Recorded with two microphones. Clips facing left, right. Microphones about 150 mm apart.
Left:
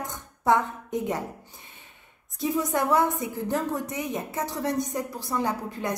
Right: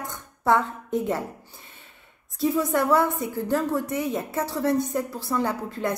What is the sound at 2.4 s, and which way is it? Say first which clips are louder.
A woman's voice: right 3 dB; 15° left (ahead or behind).